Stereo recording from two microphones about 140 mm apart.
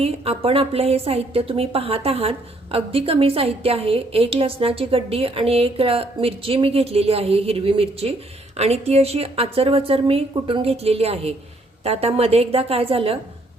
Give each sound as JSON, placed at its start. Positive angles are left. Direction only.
{"t": 0.0, "sound": "a woman's voice", "side_deg": -45}